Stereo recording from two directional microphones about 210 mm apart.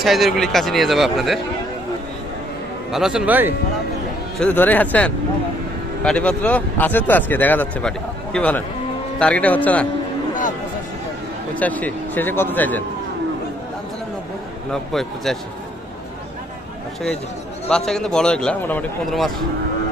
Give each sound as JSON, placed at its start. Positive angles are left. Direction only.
{"t": 0.0, "sound": "a man's voice", "side_deg": 0}
{"t": 2.9, "sound": "a man's voice", "side_deg": 0}
{"t": 4.4, "sound": "speech", "side_deg": 5}
{"t": 11.5, "sound": "speech", "side_deg": 5}
{"t": 14.7, "sound": "a man's voice", "side_deg": 0}
{"t": 17.7, "sound": "a man's voice", "side_deg": 5}